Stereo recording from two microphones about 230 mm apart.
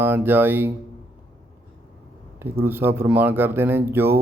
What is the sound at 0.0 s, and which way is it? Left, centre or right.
Mantra, centre.